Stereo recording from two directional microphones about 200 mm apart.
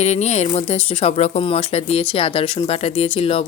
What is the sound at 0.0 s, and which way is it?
Speech, 35° left (ahead or behind).